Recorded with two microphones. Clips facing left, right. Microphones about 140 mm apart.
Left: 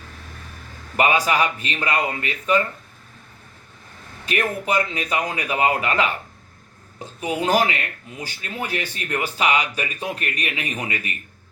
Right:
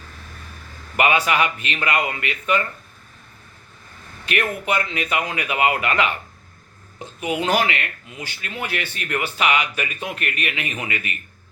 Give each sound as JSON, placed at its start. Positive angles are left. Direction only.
{"t": 0.9, "sound": "a man's voice", "side_deg": 35}
{"t": 4.3, "sound": "a man's voice", "side_deg": 35}